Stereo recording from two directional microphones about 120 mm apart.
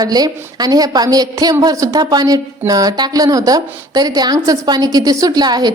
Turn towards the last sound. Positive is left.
turn(degrees=-35)  # may be behind; listen again after turning